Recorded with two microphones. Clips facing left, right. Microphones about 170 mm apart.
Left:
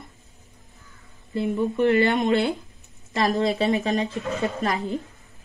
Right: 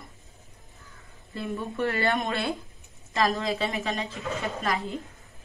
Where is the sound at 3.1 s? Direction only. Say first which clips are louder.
Left 4 dB; 35° left (ahead or behind).